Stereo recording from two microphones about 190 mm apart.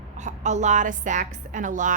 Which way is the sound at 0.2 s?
40° right (ahead or behind).